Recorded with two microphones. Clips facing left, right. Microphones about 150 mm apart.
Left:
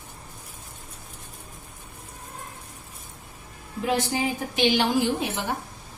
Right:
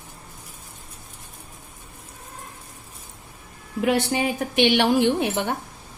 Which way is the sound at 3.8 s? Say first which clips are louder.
Right 3 dB; 70° right (ahead or behind).